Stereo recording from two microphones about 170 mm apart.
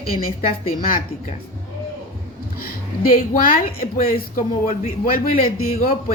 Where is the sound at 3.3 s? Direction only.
55° left (ahead or behind).